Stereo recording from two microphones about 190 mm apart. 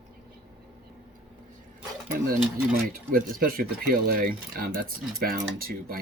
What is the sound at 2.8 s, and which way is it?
Speech, 50° right (ahead or behind).